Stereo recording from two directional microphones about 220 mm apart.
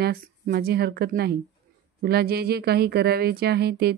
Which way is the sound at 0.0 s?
45° right (ahead or behind).